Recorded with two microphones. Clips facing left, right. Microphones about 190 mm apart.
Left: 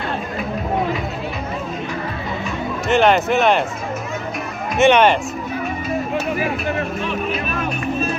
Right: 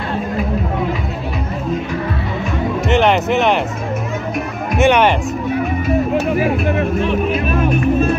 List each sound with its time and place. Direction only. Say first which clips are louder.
2.9 s speech: even; 20° right (ahead or behind)
4.7 s speech: even; 15° right (ahead or behind)
7.2 s speech: right 6 dB; 50° right (ahead or behind)